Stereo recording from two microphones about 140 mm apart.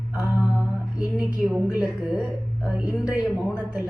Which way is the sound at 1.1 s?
5° right (ahead or behind).